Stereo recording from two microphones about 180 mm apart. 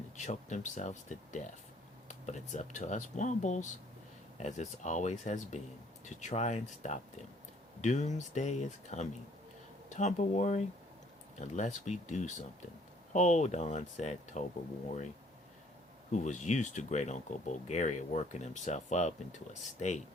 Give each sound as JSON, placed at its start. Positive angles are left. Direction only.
{"t": 0.3, "sound": "speech", "side_deg": 40}
{"t": 16.1, "sound": "speech", "side_deg": 40}